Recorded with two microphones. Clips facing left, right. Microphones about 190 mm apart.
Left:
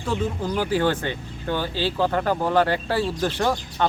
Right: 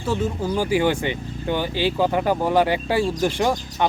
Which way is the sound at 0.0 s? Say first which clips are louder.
Right 2 dB; 10° right (ahead or behind).